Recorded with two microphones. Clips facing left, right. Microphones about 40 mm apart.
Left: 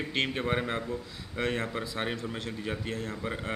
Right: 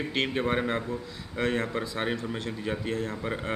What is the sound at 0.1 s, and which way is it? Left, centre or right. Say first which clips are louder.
A man's voice: right 2 dB; centre.